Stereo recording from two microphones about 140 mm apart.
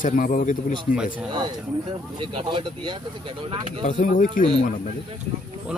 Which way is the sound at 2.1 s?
35° right (ahead or behind).